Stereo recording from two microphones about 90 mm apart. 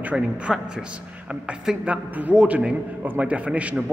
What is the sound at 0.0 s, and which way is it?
A man's voice, 15° right (ahead or behind).